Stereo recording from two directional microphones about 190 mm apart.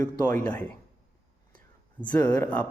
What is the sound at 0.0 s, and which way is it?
Speech, 10° left (ahead or behind).